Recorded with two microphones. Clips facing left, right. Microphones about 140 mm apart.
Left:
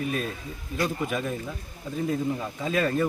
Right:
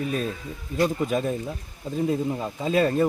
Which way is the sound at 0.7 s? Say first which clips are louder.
Right 5 dB; 35° right (ahead or behind).